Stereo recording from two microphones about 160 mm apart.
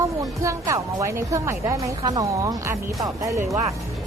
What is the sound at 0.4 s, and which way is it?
A woman's voice, 20° right (ahead or behind).